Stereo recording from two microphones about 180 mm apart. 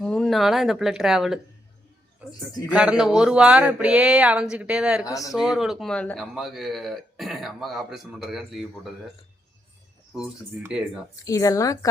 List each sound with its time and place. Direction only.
0.0 s a man's voice: 5° left (ahead or behind)
5.0 s a woman's voice: 20° left (ahead or behind)
5.3 s a man's voice: centre (ahead or behind)
10.6 s a man's voice: 5° right (ahead or behind)
11.2 s a woman's voice: 20° left (ahead or behind)